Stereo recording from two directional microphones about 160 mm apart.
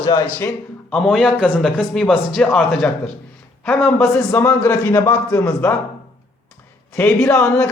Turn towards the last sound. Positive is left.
turn(degrees=10)  # may be behind; listen again after turning